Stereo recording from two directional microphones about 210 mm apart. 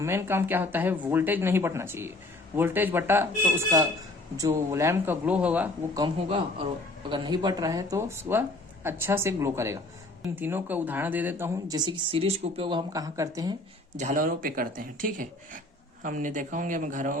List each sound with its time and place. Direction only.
0.0 s speech: 10° right (ahead or behind)
6.0 s a man's voice: 25° right (ahead or behind)
13.9 s speech: 35° right (ahead or behind)